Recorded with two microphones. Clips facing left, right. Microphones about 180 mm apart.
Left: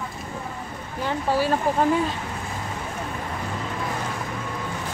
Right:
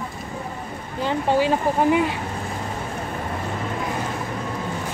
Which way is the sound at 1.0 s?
20° right (ahead or behind).